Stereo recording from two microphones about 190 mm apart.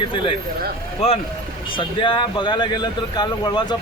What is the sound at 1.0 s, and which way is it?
Speech, 30° left (ahead or behind).